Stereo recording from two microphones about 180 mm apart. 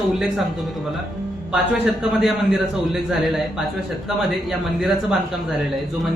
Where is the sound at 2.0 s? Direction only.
Centre (ahead or behind).